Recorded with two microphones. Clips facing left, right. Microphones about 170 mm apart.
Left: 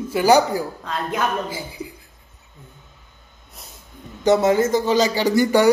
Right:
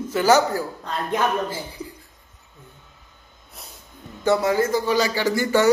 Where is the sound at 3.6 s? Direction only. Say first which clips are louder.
Right 1 dB; centre (ahead or behind).